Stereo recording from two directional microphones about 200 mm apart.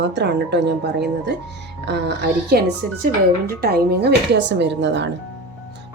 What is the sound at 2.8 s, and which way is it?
Speech, 40° right (ahead or behind).